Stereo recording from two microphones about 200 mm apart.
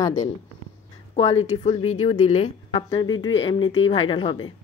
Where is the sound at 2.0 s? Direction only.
30° left (ahead or behind).